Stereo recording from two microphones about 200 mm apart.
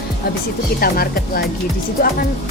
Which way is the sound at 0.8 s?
50° left (ahead or behind).